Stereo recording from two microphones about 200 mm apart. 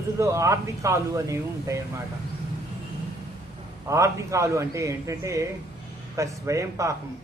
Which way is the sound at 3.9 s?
15° right (ahead or behind).